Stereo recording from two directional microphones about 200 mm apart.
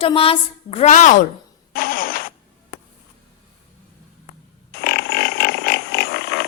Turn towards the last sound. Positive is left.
turn(degrees=55)  # may be behind; listen again after turning